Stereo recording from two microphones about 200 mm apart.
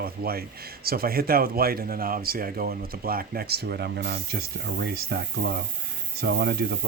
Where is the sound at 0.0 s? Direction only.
50° right (ahead or behind).